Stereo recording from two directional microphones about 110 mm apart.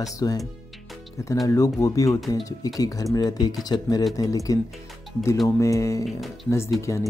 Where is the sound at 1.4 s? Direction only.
30° left (ahead or behind).